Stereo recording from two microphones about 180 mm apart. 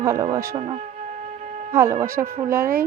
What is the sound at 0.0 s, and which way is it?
Speech, 15° right (ahead or behind).